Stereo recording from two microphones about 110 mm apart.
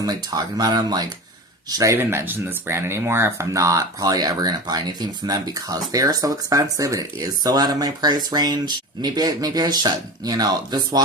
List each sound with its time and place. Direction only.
0.0 s speech: 35° right (ahead or behind)